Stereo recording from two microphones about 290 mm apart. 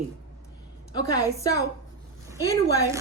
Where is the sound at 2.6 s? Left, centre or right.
Centre.